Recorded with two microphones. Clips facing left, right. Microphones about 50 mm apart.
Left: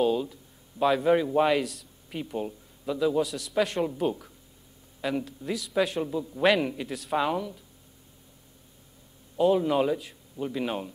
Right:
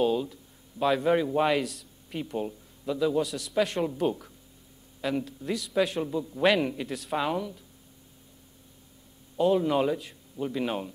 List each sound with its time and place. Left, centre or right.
0.0 s speech: centre
9.4 s speech: centre